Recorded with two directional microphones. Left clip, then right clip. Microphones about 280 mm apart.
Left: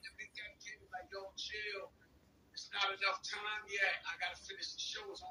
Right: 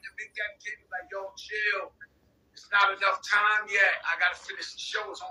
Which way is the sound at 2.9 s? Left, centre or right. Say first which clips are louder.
Right 14 dB; right.